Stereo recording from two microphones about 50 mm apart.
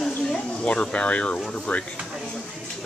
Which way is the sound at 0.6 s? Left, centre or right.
Left.